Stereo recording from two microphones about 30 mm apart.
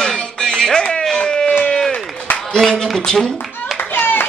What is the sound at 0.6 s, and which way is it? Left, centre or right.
Music, left.